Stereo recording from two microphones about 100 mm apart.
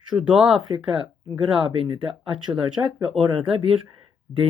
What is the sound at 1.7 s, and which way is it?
Speech, 65° right (ahead or behind).